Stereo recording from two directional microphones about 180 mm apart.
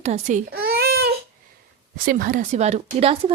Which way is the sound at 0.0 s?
40° right (ahead or behind).